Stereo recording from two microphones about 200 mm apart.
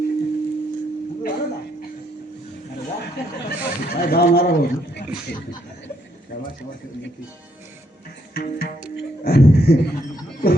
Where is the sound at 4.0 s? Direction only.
50° left (ahead or behind).